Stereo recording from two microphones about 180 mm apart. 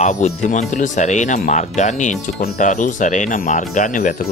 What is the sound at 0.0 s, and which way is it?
Speech, 40° left (ahead or behind).